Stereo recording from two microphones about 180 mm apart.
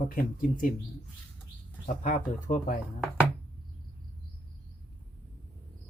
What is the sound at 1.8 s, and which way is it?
Speech, 45° left (ahead or behind).